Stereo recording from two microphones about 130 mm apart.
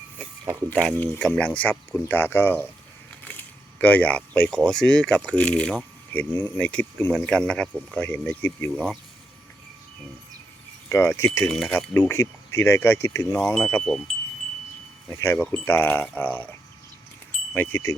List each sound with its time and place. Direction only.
0.7 s speech: 10° left (ahead or behind)
10.8 s speech: 20° left (ahead or behind)
11.4 s speech: 5° left (ahead or behind)
11.9 s speech: 20° left (ahead or behind)
15.1 s speech: 20° left (ahead or behind)